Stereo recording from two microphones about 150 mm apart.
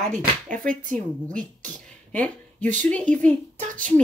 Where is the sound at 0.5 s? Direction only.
65° right (ahead or behind).